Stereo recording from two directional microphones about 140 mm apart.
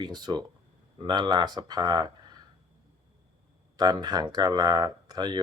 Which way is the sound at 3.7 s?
30° right (ahead or behind).